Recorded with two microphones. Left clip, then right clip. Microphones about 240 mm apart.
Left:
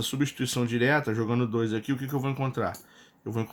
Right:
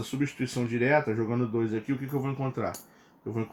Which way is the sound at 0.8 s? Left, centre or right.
Left.